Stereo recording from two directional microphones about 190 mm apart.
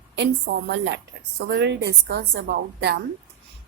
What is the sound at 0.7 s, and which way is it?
Speech, 65° right (ahead or behind).